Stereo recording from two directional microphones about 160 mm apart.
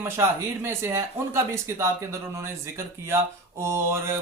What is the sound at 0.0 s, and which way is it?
Speech, 15° right (ahead or behind).